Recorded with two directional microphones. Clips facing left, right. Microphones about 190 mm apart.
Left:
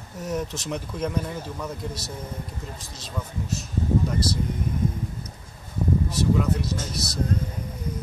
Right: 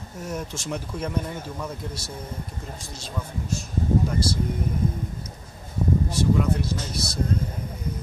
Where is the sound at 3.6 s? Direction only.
Centre (ahead or behind).